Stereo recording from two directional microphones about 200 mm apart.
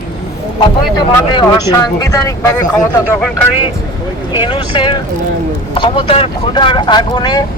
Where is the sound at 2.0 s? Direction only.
15° left (ahead or behind).